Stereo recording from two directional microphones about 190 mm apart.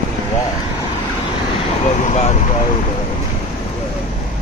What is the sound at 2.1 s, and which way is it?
Speech, 35° left (ahead or behind).